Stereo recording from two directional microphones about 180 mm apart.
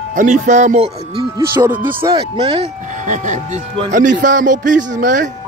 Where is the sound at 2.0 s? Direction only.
20° right (ahead or behind).